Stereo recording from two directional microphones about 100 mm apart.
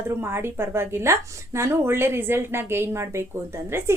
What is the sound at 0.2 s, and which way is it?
A woman's voice, 25° right (ahead or behind).